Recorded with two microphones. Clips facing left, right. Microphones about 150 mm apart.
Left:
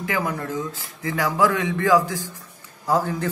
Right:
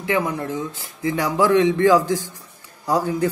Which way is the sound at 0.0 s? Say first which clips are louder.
Right 3 dB; 25° right (ahead or behind).